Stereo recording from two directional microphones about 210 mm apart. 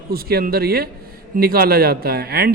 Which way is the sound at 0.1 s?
45° right (ahead or behind).